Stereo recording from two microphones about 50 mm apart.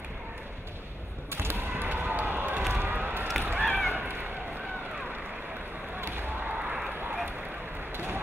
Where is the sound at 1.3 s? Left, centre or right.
Right.